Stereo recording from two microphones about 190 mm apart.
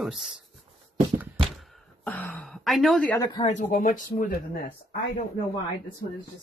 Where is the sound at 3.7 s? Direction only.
45° left (ahead or behind).